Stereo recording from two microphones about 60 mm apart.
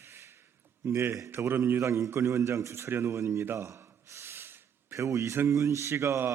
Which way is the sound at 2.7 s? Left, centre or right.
Right.